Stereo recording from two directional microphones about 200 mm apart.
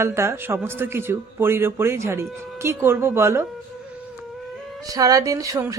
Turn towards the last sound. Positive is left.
turn(degrees=-15)  # may be behind; listen again after turning